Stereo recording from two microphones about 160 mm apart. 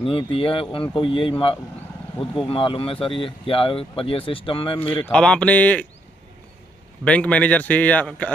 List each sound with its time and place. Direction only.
0.1 s speech: 35° left (ahead or behind)
2.4 s speech: 35° left (ahead or behind)
5.0 s a man's voice: 5° left (ahead or behind)
7.1 s a man's voice: 10° left (ahead or behind)